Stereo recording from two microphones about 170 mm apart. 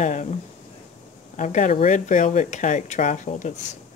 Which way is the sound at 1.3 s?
45° left (ahead or behind).